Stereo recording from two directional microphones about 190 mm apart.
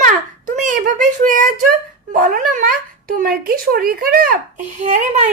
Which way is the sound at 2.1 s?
45° right (ahead or behind).